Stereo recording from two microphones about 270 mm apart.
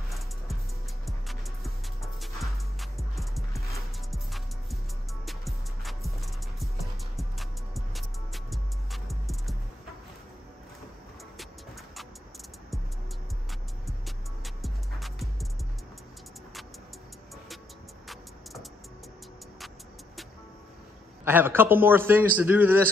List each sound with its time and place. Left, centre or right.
1.0 s music: centre
14.0 s music: centre
18.0 s music: centre
21.2 s a man's voice: centre